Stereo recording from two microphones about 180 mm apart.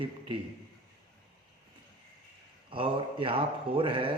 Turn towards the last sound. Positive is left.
turn(degrees=-30)  # may be behind; listen again after turning